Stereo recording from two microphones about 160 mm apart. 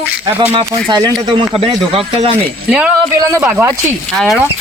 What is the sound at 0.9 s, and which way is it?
Speech, 25° right (ahead or behind).